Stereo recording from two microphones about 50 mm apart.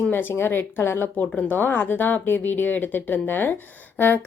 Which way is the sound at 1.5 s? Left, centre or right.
Left.